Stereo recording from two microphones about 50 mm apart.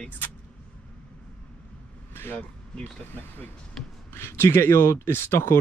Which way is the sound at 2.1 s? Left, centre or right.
Left.